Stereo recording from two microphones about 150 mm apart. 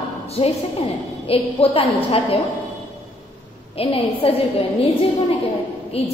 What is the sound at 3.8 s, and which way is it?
Speech, 40° left (ahead or behind).